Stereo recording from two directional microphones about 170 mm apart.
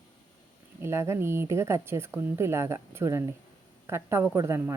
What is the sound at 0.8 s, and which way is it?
Speech, 15° right (ahead or behind).